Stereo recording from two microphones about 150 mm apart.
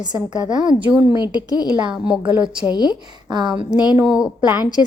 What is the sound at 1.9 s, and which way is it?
Speech, 5° right (ahead or behind).